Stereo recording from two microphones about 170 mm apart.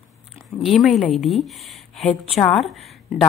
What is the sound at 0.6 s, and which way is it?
A woman's voice, centre (ahead or behind).